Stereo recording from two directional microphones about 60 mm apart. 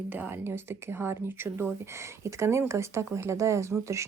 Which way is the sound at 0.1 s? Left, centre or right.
Right.